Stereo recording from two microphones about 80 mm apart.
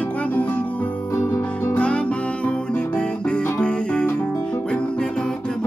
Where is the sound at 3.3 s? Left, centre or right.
Centre.